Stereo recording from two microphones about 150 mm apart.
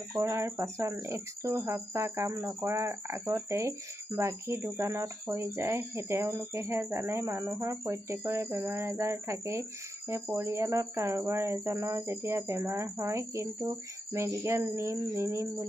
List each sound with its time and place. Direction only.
0.1 s speech: 20° right (ahead or behind)